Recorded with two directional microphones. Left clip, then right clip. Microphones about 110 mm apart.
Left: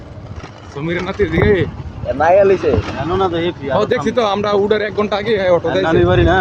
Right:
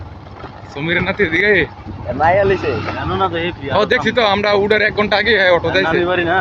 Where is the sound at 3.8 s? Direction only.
30° left (ahead or behind).